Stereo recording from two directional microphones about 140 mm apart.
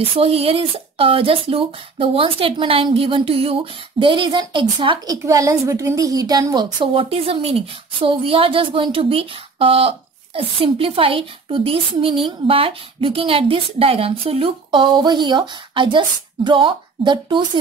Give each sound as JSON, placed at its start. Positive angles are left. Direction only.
{"t": 0.1, "sound": "speech", "side_deg": -45}